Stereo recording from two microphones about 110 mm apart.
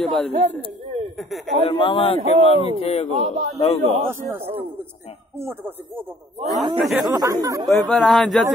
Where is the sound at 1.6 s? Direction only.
50° left (ahead or behind).